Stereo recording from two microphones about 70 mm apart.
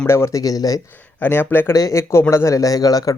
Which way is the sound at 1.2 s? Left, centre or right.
Left.